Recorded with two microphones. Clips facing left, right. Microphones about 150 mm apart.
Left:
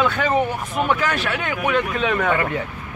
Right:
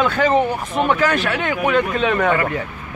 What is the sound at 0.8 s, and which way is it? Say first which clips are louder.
Speech: right 3 dB; 30° right (ahead or behind).